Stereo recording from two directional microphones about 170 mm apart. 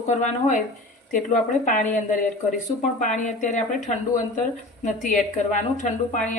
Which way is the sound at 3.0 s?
45° left (ahead or behind).